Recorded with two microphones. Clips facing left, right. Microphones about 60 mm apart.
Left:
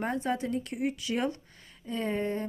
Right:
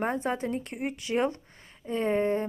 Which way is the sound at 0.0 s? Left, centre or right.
Right.